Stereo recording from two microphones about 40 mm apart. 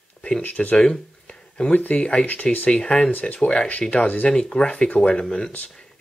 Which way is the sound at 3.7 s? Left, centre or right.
Left.